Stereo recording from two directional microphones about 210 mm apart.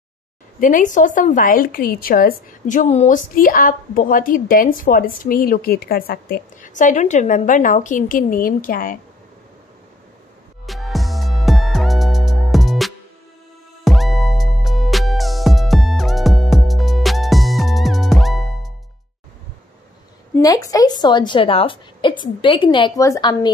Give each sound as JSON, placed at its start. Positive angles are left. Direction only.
{"t": 0.6, "sound": "a woman's voice", "side_deg": 40}
{"t": 10.7, "sound": "music", "side_deg": 0}
{"t": 20.3, "sound": "a woman's voice", "side_deg": 15}